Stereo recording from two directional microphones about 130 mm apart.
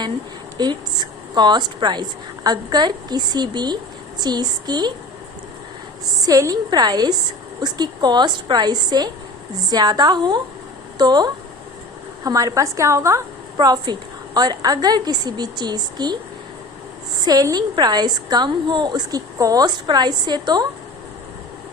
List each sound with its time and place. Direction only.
0.5 s a woman's voice: 35° right (ahead or behind)
6.2 s a woman's voice: 30° right (ahead or behind)
17.2 s a woman's voice: 30° right (ahead or behind)